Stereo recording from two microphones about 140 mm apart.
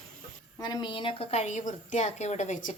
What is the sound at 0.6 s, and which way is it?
A woman's voice, 30° left (ahead or behind).